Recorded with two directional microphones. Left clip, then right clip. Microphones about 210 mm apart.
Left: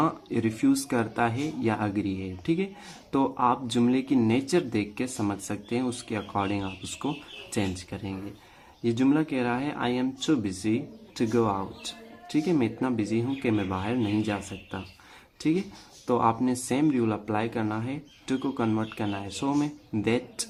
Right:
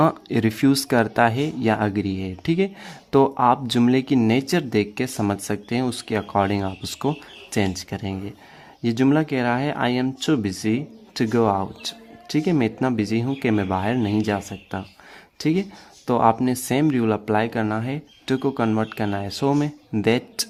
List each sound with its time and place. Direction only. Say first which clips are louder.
0.0 s speech: right 7 dB; 40° right (ahead or behind)